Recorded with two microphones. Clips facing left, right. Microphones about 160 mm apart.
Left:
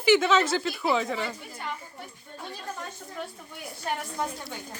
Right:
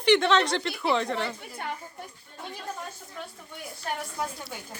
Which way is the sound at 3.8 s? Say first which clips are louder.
Left 2 dB; 5° right (ahead or behind).